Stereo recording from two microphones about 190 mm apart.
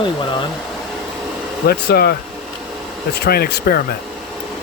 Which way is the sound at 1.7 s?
55° left (ahead or behind).